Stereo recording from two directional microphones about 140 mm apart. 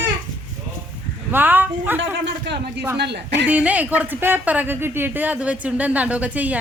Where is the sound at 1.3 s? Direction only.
15° right (ahead or behind).